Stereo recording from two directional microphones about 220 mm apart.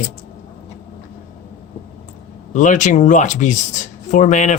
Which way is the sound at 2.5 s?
35° left (ahead or behind).